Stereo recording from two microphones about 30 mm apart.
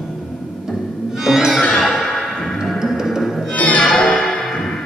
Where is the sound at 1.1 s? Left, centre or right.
Centre.